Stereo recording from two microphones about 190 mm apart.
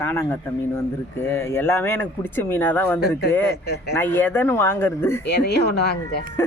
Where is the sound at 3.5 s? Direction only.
55° left (ahead or behind).